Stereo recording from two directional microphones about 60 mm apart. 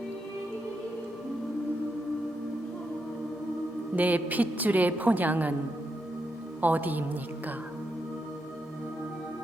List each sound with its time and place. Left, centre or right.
3.9 s a woman's voice: right
6.6 s a woman's voice: right